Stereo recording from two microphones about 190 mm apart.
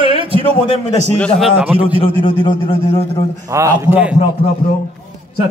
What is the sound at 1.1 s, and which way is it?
Speech, 5° left (ahead or behind).